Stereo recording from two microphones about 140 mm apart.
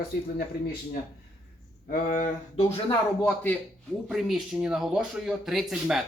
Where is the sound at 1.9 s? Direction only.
70° left (ahead or behind).